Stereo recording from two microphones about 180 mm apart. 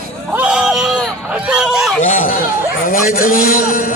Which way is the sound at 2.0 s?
45° left (ahead or behind).